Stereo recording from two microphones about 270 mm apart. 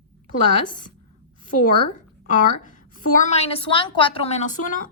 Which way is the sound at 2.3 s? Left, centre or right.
Left.